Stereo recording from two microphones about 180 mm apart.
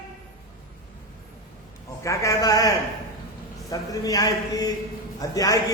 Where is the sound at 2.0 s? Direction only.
15° left (ahead or behind).